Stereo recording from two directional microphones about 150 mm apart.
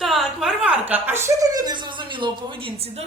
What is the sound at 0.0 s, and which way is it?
A woman's voice, centre (ahead or behind).